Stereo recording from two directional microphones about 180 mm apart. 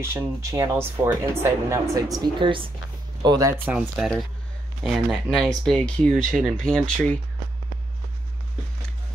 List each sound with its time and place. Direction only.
0.0 s speech: 15° right (ahead or behind)
2.1 s speech: 25° right (ahead or behind); by 7.2 s 5° left (ahead or behind)